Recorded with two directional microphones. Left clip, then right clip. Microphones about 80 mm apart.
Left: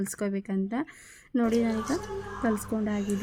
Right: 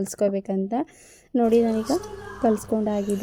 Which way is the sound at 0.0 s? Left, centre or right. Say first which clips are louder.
Right 9 dB; right.